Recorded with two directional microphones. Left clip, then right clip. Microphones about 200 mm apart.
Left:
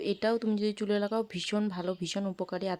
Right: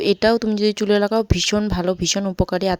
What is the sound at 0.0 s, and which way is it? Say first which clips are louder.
Speech: right 13 dB; 40° right (ahead or behind).